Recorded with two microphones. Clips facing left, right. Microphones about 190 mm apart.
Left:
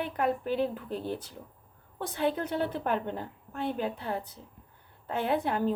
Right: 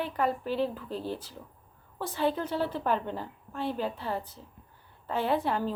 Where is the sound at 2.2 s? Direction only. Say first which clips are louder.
Even; 55° left (ahead or behind).